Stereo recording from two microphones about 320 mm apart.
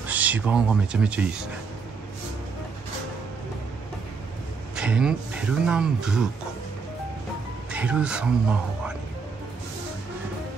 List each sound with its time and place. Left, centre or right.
0.0 s speech: centre
4.7 s speech: centre
7.7 s speech: centre